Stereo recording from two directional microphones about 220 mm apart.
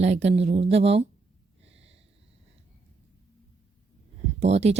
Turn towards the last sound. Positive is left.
turn(degrees=-30)  # may be behind; listen again after turning